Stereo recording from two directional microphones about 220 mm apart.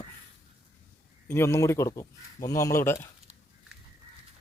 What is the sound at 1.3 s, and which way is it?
Speech, 10° left (ahead or behind).